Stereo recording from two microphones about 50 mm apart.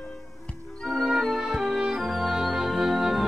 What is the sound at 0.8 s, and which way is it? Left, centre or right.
Music, centre.